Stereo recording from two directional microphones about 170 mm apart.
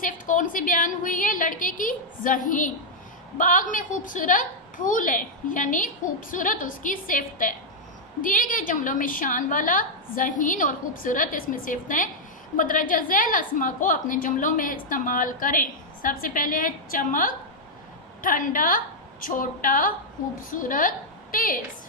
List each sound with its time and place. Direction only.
0.0 s a woman's voice: 50° left (ahead or behind)